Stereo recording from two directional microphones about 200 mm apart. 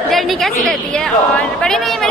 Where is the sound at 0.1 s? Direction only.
Centre (ahead or behind).